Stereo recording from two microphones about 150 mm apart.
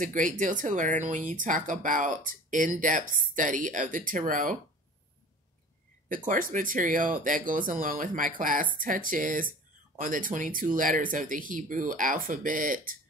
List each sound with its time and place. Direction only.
0.0 s speech: 60° right (ahead or behind)
6.0 s speech: 65° right (ahead or behind)